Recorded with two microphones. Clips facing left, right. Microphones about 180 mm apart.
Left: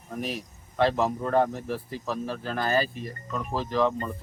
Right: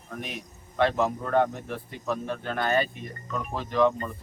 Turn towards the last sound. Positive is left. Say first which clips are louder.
# right 2 dB
turn(degrees=30)  # may be behind; listen again after turning